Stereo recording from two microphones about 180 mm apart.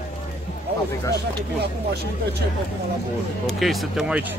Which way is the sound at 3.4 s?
Centre (ahead or behind).